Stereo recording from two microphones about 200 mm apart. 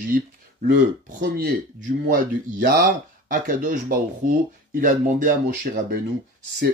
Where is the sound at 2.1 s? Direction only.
40° right (ahead or behind).